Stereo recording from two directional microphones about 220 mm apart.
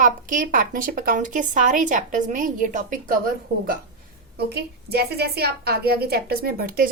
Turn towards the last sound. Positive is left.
turn(degrees=-40)  # may be behind; listen again after turning